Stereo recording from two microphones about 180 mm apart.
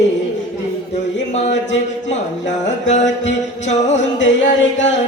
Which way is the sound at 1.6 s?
40° left (ahead or behind).